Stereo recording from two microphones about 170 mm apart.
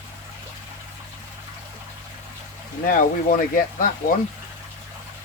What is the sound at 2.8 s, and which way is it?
Speech, 55° left (ahead or behind).